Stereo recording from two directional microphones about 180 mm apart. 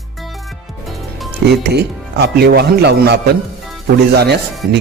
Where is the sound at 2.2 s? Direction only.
65° right (ahead or behind).